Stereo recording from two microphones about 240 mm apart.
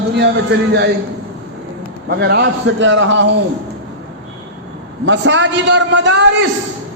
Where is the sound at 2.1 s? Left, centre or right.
Right.